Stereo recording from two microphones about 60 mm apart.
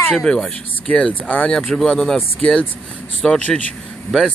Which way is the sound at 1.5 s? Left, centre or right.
Centre.